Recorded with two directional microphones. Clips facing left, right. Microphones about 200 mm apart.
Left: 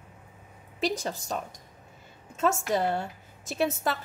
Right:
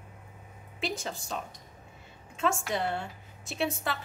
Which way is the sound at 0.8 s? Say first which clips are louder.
Left 5 dB; 40° left (ahead or behind).